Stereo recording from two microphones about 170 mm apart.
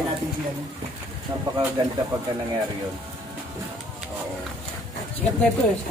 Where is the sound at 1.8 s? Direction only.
25° right (ahead or behind).